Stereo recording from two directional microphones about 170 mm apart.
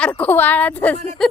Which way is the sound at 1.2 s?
Centre (ahead or behind).